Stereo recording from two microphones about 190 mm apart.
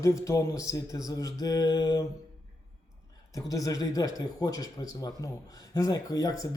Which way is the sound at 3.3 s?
15° left (ahead or behind).